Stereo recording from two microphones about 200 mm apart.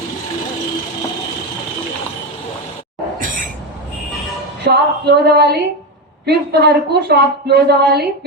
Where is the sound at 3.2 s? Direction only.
40° right (ahead or behind).